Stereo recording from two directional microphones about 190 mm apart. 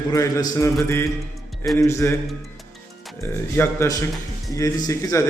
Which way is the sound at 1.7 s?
15° left (ahead or behind).